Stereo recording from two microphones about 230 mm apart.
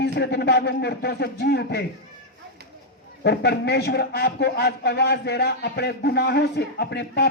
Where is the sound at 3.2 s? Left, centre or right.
Left.